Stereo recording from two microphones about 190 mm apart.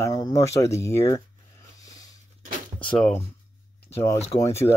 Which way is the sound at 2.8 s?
5° left (ahead or behind).